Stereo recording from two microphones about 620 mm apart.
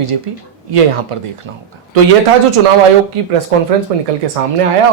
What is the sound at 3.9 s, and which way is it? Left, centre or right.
Speech, right.